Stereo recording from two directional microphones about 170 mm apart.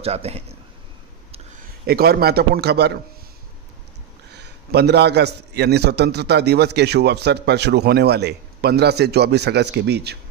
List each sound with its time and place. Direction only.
0.0 s a man's voice: 40° right (ahead or behind)
1.9 s a man's voice: 65° right (ahead or behind)
4.4 s a man's voice: 75° right (ahead or behind)